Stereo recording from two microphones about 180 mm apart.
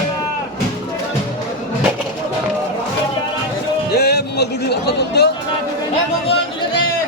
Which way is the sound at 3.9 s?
65° left (ahead or behind).